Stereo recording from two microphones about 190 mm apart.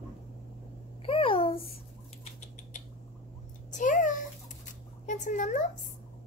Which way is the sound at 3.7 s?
45° left (ahead or behind).